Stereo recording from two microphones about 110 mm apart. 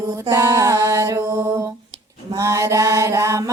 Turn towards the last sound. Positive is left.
turn(degrees=-30)  # may be behind; listen again after turning